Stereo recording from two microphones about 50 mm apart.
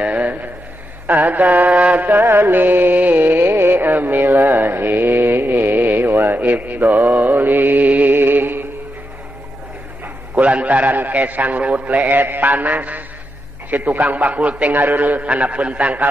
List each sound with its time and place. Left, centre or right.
0.0 s a sound: right
1.0 s a man's voice: right
2.0 s music: right
10.0 s a man's voice: right